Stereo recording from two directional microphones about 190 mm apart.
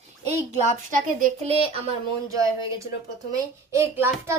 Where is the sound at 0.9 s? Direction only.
45° right (ahead or behind).